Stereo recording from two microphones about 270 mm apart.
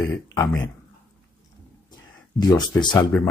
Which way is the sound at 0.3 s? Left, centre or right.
Centre.